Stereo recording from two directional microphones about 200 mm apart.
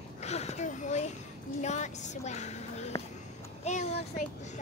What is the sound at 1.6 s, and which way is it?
A woman's voice, 35° left (ahead or behind).